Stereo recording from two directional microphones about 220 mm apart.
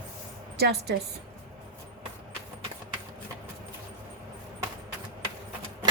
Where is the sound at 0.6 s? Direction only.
45° right (ahead or behind).